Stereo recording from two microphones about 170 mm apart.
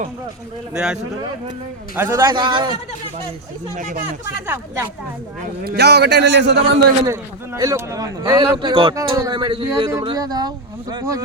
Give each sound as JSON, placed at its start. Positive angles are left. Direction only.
{"t": 0.7, "sound": "speech", "side_deg": -5}
{"t": 2.0, "sound": "speech", "side_deg": -15}
{"t": 5.6, "sound": "a man's voice", "side_deg": -75}
{"t": 7.0, "sound": "speech", "side_deg": -20}